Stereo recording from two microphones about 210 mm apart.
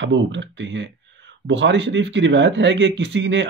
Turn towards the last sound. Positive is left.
turn(degrees=-60)  # may be behind; listen again after turning